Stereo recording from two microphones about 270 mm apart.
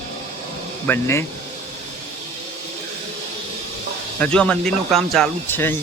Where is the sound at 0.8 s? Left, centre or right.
Centre.